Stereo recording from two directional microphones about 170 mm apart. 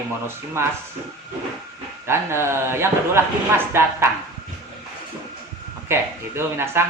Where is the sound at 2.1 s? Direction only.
15° right (ahead or behind).